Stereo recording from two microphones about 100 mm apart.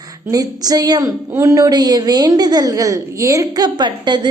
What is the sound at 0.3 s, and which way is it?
A child's voice, 40° right (ahead or behind).